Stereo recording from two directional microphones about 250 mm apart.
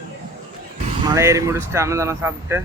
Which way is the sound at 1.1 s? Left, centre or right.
Centre.